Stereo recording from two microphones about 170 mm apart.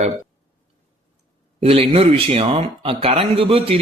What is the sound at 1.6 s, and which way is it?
A man's voice, 35° right (ahead or behind).